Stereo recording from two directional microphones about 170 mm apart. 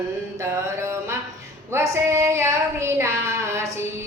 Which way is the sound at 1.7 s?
15° right (ahead or behind).